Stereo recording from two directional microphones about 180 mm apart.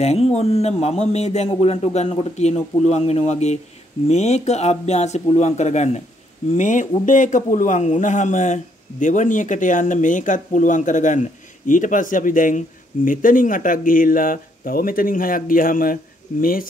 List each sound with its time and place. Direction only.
0.0 s speech: 35° left (ahead or behind); by 16.6 s 50° left (ahead or behind)